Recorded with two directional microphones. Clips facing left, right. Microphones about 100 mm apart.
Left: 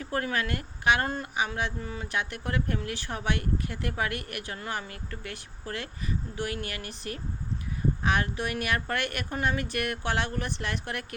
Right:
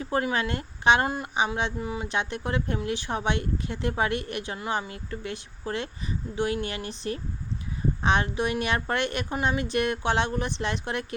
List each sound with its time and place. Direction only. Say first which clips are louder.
0.0 s speech: right 4 dB; 20° right (ahead or behind)
1.0 s speech: right 3 dB; 10° right (ahead or behind)